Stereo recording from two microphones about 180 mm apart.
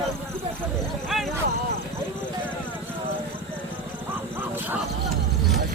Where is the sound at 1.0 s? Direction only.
Centre (ahead or behind).